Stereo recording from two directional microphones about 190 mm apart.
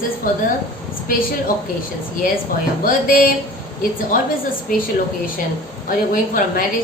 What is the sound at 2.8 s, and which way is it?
Speech, 50° left (ahead or behind).